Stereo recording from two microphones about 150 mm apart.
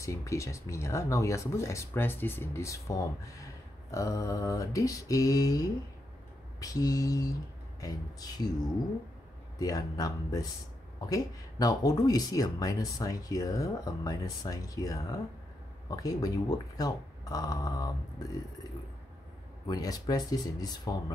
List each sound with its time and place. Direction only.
0.0 s speech: 20° left (ahead or behind)
9.6 s speech: 25° left (ahead or behind)
19.6 s speech: 25° left (ahead or behind)